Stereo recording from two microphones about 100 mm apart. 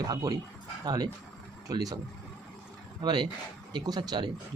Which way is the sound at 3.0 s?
45° right (ahead or behind).